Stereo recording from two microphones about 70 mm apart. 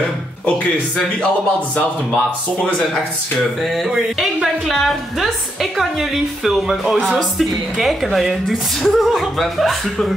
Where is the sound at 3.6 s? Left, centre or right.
Centre.